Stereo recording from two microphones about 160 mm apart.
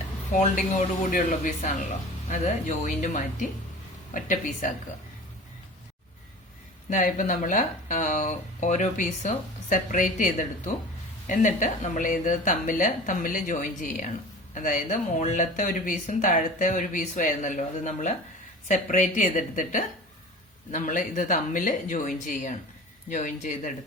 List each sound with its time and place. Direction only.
0.3 s a woman's voice: 50° left (ahead or behind)
6.9 s a woman's voice: 55° left (ahead or behind)